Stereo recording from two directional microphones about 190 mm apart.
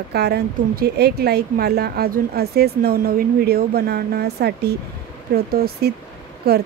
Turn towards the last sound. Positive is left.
turn(degrees=-55)  # may be behind; listen again after turning